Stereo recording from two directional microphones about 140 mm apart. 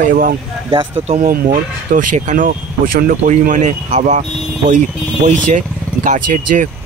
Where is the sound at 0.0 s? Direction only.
80° right.